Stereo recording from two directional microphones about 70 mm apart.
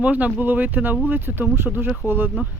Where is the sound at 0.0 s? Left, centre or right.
Centre.